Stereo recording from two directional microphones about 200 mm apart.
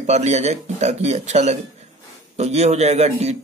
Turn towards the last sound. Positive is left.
turn(degrees=-35)  # may be behind; listen again after turning